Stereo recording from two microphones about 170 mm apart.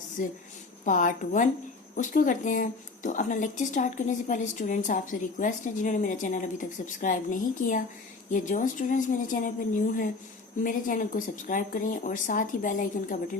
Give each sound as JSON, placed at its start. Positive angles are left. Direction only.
{"t": 0.2, "sound": "speech", "side_deg": 50}